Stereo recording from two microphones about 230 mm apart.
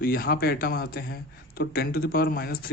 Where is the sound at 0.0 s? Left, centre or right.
Left.